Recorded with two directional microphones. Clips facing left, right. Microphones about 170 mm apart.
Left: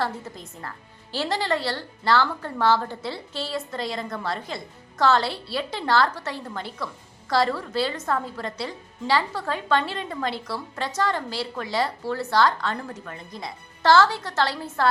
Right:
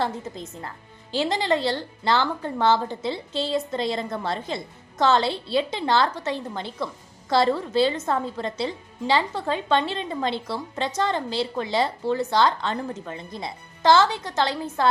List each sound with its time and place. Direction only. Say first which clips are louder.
0.0 s a woman's voice: right 2 dB; 20° right (ahead or behind)